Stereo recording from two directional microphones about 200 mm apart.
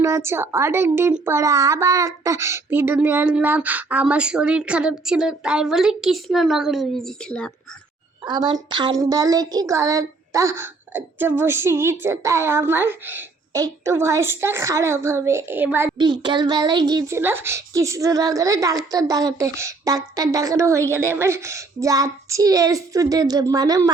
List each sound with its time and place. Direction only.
0.0 s a woman's voice: 15° right (ahead or behind); by 7.5 s 5° left (ahead or behind)
8.2 s a woman's voice: 20° right (ahead or behind)
16.0 s a woman's voice: 20° right (ahead or behind)